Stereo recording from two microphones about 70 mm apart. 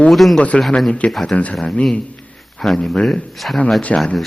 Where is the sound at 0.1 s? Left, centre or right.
Centre.